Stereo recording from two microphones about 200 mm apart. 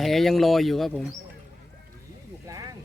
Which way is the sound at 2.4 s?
15° right (ahead or behind).